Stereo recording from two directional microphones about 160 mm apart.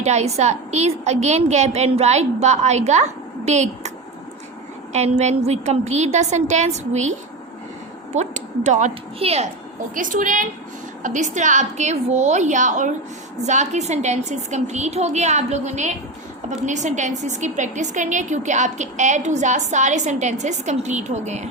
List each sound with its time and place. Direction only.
0.0 s a woman's voice: 45° right (ahead or behind)
9.9 s a woman's voice: 55° right (ahead or behind)